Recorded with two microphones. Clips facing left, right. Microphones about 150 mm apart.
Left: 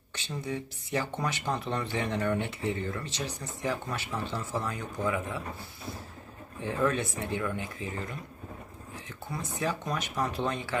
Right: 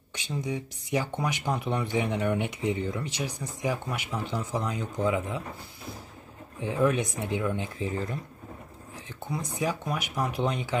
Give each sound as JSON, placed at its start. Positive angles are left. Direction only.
{"t": 0.1, "sound": "speech", "side_deg": -15}
{"t": 6.6, "sound": "speech", "side_deg": -15}
{"t": 9.3, "sound": "speech", "side_deg": -15}